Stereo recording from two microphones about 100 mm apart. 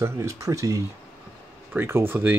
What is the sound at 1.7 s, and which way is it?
Speech, 25° right (ahead or behind).